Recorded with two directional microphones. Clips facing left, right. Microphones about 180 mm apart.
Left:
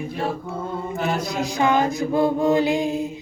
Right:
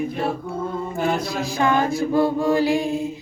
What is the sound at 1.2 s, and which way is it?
Mantra, 20° left (ahead or behind).